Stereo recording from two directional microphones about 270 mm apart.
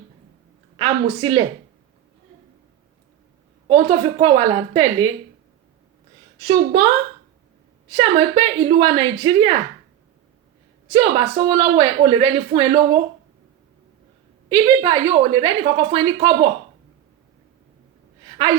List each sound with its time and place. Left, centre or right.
0.8 s a woman's voice: centre
3.7 s speech: right
6.4 s speech: right
7.9 s speech: centre
10.9 s speech: right
14.5 s a woman's voice: centre